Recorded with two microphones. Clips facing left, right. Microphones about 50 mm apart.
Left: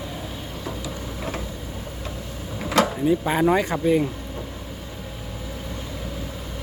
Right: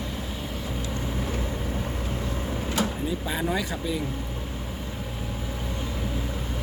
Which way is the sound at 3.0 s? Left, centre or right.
Left.